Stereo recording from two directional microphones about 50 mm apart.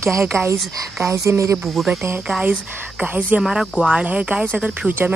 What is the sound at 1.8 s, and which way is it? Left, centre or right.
Speech, centre.